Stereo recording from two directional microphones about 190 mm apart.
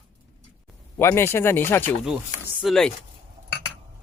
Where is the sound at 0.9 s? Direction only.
15° left (ahead or behind).